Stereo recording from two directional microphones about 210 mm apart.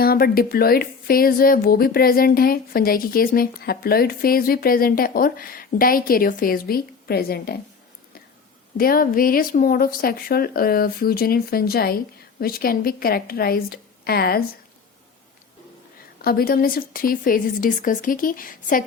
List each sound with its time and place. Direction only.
0.0 s speech: 45° left (ahead or behind)
8.8 s speech: 45° left (ahead or behind)
16.2 s speech: 45° left (ahead or behind)